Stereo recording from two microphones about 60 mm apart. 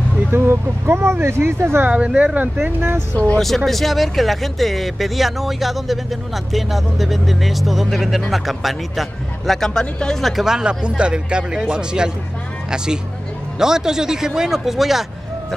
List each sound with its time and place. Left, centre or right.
0.3 s speech: right
1.9 s speech: right
2.3 s speech: right
3.3 s speech: centre
9.5 s speech: centre
10.3 s speech: centre